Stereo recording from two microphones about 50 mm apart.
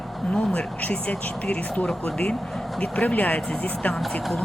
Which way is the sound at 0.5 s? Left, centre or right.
Left.